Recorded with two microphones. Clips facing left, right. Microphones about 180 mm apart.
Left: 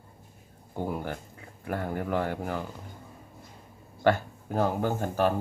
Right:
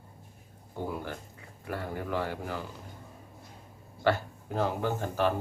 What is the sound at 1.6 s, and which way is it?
Speech, 50° left (ahead or behind).